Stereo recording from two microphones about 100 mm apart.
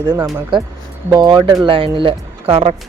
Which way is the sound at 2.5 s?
90° right.